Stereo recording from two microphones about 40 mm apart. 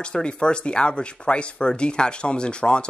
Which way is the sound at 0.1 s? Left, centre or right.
Left.